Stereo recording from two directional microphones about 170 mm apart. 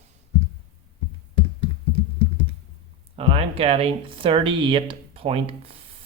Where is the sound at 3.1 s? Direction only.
35° right (ahead or behind).